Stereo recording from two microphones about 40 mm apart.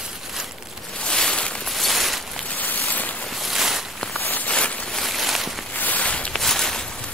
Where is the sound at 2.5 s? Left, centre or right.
Left.